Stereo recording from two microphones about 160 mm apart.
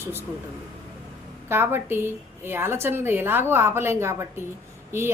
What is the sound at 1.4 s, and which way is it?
A woman's voice, 15° right (ahead or behind).